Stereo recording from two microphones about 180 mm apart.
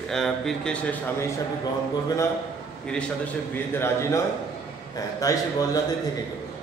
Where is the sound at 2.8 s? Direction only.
5° left (ahead or behind).